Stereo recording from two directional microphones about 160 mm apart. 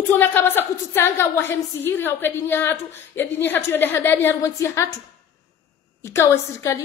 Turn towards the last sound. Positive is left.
turn(degrees=15)  # may be behind; listen again after turning